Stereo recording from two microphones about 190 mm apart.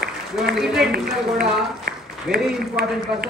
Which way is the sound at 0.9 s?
55° right (ahead or behind).